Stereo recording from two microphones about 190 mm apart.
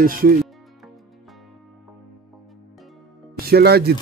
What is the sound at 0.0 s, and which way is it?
Speech, 50° right (ahead or behind).